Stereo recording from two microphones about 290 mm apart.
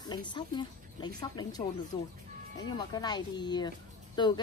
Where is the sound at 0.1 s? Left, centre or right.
Centre.